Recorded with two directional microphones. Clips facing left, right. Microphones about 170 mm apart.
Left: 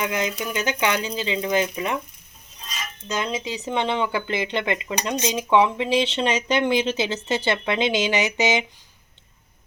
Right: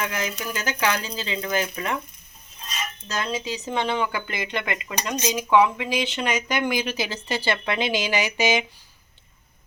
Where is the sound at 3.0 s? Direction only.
20° left (ahead or behind).